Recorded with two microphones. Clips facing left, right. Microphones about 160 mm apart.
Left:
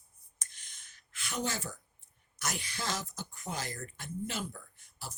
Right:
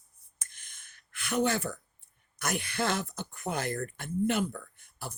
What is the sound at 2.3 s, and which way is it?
Speech, 55° right (ahead or behind).